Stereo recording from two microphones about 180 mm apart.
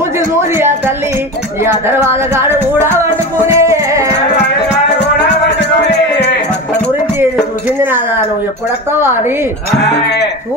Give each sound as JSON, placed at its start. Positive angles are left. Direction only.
{"t": 1.6, "sound": "speech", "side_deg": -15}
{"t": 3.5, "sound": "music", "side_deg": -15}
{"t": 5.6, "sound": "music", "side_deg": 70}
{"t": 7.8, "sound": "chink", "side_deg": -10}
{"t": 10.0, "sound": "sheep", "side_deg": 70}